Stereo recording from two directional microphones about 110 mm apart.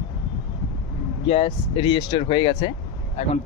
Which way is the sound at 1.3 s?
55° left (ahead or behind).